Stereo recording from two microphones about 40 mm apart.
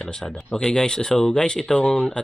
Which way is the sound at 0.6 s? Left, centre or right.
Left.